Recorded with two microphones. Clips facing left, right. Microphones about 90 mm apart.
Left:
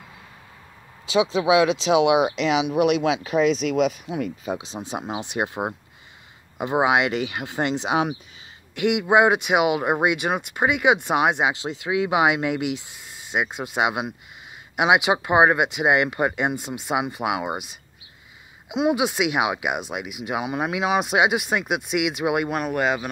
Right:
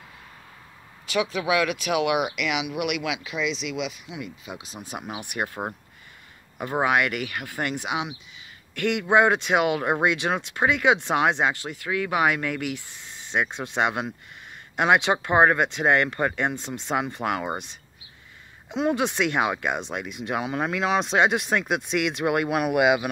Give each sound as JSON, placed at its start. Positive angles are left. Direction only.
{"t": 1.0, "sound": "speech", "side_deg": 20}
{"t": 4.6, "sound": "speech", "side_deg": 25}
{"t": 11.5, "sound": "speech", "side_deg": 20}